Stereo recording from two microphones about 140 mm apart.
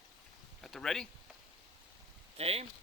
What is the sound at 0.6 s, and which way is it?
Speech, centre (ahead or behind).